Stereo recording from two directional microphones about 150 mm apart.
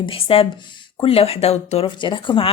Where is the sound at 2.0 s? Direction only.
30° left (ahead or behind).